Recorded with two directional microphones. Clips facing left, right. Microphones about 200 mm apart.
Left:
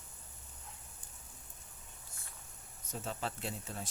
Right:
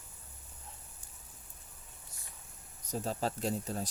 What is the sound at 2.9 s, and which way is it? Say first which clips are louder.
Speech: right 6 dB; 35° right (ahead or behind).